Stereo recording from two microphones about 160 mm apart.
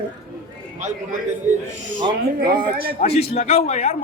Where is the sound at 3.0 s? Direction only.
40° left (ahead or behind).